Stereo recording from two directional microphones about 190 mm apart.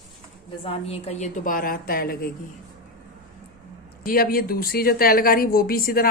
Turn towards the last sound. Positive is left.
turn(degrees=50)  # may be behind; listen again after turning